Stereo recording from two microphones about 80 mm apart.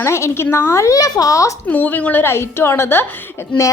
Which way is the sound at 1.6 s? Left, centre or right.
Left.